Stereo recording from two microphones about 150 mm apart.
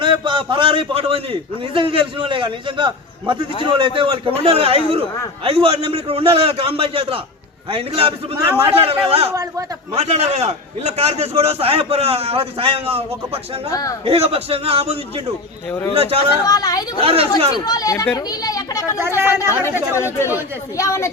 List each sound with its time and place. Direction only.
0.0 s a man's voice: 35° right (ahead or behind)
9.3 s a man's voice: 25° right (ahead or behind)
9.9 s a man's voice: 45° right (ahead or behind)
16.4 s a child's voice: 25° left (ahead or behind)
17.0 s a man's voice: 40° right (ahead or behind)
17.7 s a child's voice: 25° left (ahead or behind)
19.0 s speech: 15° right (ahead or behind)
20.0 s a child's voice: 15° left (ahead or behind)